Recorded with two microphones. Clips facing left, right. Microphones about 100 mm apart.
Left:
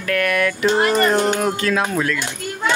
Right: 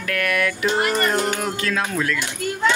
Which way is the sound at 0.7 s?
30° left (ahead or behind).